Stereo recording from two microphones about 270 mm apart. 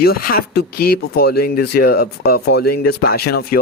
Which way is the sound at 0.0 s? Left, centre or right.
Left.